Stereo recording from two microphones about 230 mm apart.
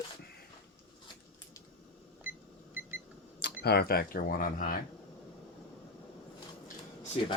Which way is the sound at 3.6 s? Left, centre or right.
Left.